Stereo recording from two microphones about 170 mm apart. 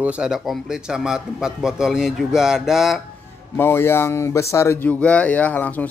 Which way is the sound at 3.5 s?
15° left (ahead or behind).